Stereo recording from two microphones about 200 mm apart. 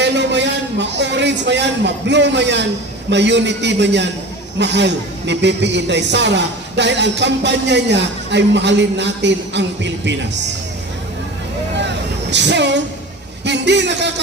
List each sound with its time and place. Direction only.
0.0 s a man's voice: 60° right (ahead or behind)
11.8 s vehicle: 60° right (ahead or behind)
13.4 s a man's voice: 60° right (ahead or behind)